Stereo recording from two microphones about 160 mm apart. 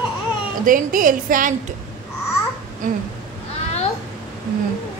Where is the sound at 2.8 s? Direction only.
55° right (ahead or behind).